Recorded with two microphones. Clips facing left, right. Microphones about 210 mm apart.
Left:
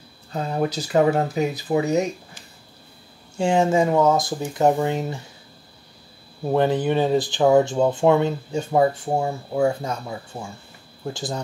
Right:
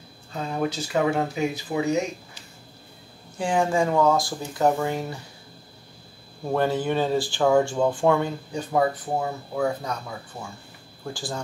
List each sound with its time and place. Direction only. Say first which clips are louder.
0.3 s speech: left 3 dB; 40° left (ahead or behind)
3.3 s speech: left 4 dB; 25° left (ahead or behind)
6.5 s speech: left 4 dB; 20° left (ahead or behind)